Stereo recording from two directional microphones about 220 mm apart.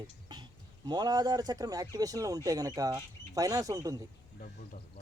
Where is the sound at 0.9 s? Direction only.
20° right (ahead or behind).